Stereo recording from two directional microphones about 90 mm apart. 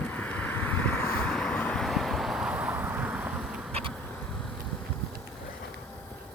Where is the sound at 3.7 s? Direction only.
90° right.